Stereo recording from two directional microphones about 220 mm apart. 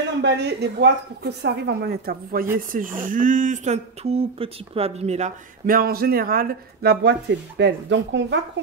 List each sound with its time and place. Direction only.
0.2 s a woman's voice: 50° right (ahead or behind)